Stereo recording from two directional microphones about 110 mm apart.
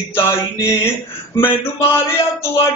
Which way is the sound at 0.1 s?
25° left (ahead or behind).